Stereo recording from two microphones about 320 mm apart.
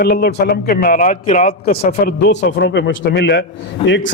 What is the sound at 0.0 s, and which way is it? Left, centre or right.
A man's voice, left.